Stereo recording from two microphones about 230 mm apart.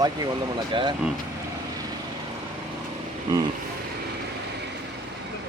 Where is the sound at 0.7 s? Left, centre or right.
Right.